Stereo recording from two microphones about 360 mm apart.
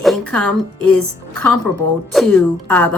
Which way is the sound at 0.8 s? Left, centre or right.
Right.